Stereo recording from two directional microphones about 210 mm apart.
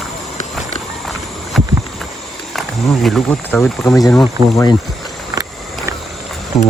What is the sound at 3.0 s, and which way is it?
Speech, 5° left (ahead or behind).